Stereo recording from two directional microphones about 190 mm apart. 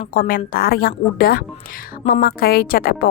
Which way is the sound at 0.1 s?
50° left (ahead or behind).